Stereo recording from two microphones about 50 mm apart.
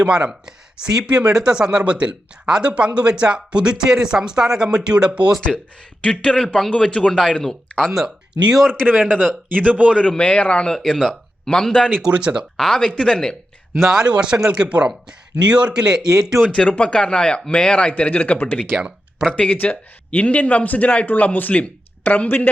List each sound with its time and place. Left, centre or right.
0.0 s speech: right
6.0 s a man's voice: left
7.9 s speech: centre
8.6 s speech: centre
9.5 s speech: right
9.9 s a man's voice: centre
10.8 s speech: centre
12.0 s speech: centre
12.5 s speech: centre
13.9 s speech: centre
16.5 s a man's voice: left